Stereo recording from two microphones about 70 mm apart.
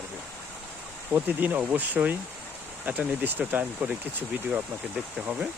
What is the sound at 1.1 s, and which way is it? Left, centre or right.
Speech, right.